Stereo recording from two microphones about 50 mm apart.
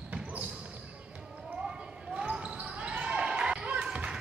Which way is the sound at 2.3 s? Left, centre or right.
Right.